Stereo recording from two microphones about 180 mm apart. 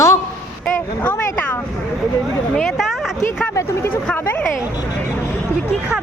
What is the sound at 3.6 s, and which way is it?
Speech, 15° left (ahead or behind).